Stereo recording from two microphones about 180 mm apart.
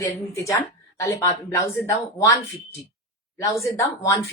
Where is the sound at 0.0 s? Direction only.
15° left (ahead or behind).